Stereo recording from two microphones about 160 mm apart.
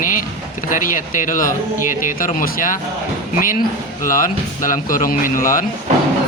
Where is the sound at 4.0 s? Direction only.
60° left (ahead or behind).